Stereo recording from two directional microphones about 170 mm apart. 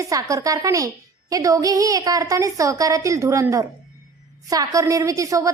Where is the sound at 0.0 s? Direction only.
20° right (ahead or behind).